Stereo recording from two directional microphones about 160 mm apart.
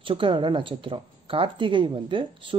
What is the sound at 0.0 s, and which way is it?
Speech, 30° right (ahead or behind).